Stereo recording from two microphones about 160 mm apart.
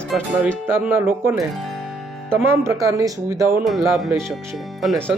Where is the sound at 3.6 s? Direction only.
Centre (ahead or behind).